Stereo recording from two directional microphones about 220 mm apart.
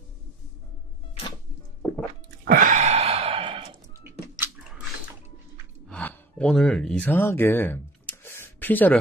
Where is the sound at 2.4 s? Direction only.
35° right (ahead or behind).